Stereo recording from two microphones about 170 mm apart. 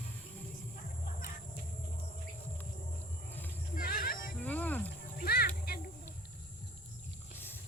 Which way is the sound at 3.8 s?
55° left (ahead or behind).